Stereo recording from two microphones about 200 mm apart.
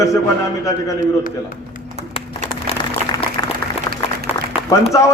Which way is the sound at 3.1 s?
25° left (ahead or behind).